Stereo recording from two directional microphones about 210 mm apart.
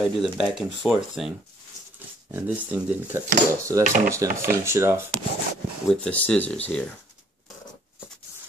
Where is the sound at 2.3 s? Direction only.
10° right (ahead or behind).